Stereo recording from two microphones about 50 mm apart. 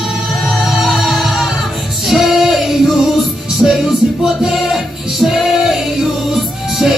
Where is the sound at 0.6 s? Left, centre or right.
Centre.